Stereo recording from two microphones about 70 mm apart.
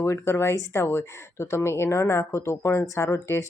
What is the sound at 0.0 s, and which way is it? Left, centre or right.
Speech, left.